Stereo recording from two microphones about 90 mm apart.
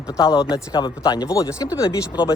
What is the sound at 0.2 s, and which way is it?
Speech, 40° left (ahead or behind).